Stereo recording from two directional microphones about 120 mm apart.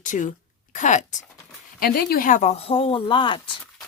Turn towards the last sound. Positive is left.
turn(degrees=40)  # may be behind; listen again after turning